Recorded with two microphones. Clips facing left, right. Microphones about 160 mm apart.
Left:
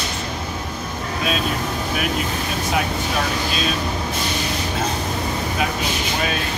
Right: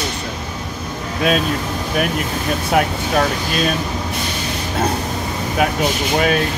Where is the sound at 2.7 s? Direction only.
55° right (ahead or behind).